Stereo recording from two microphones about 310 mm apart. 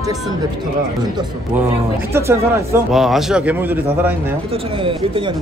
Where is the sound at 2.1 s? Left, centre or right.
Centre.